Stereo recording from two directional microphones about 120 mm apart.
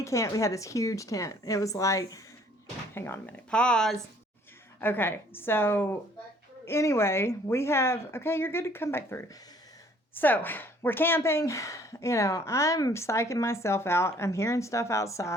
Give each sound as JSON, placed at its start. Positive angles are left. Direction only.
{"t": 0.0, "sound": "speech", "side_deg": 25}
{"t": 4.8, "sound": "speech", "side_deg": 15}